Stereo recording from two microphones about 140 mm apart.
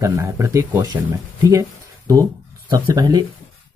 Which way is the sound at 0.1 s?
15° right (ahead or behind).